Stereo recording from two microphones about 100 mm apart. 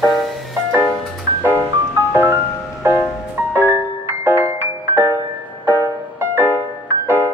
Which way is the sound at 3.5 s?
25° right (ahead or behind).